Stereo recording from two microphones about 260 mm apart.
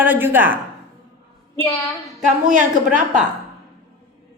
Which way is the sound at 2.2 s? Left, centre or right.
Right.